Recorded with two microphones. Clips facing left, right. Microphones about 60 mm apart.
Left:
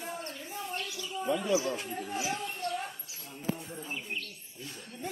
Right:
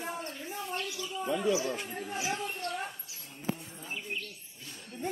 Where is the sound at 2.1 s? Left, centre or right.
Right.